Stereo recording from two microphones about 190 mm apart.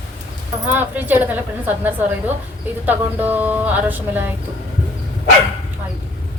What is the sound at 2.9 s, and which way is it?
Speech, 10° right (ahead or behind).